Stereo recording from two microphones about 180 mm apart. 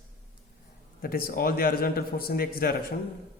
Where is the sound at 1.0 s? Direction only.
55° left (ahead or behind).